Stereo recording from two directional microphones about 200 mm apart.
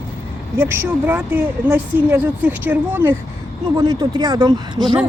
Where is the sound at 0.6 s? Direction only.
10° right (ahead or behind).